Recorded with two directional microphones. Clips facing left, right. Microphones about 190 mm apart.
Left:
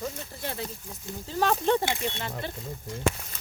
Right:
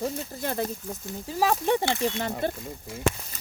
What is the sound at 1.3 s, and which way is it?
Speech, 10° right (ahead or behind).